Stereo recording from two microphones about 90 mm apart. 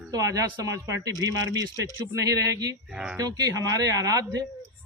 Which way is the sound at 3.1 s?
45° right (ahead or behind).